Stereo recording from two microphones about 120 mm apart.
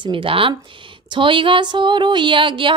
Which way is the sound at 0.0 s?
45° right (ahead or behind).